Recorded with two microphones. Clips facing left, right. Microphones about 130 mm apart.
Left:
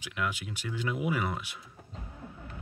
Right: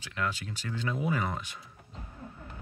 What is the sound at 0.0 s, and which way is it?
Speech, 10° left (ahead or behind).